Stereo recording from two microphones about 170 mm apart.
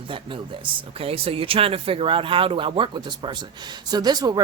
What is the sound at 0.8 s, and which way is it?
Speech, 35° right (ahead or behind).